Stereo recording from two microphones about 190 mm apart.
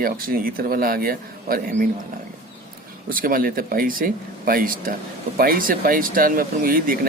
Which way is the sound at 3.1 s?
50° right (ahead or behind).